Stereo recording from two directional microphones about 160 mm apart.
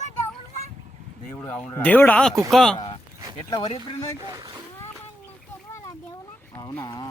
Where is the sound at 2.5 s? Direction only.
Centre (ahead or behind).